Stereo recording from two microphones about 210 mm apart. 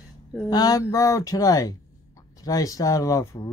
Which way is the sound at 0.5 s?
20° left (ahead or behind).